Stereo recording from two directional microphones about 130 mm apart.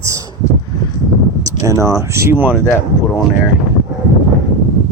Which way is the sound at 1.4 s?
25° right (ahead or behind).